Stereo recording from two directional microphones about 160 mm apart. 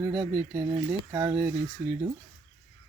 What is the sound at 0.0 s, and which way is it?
Speech, 10° right (ahead or behind).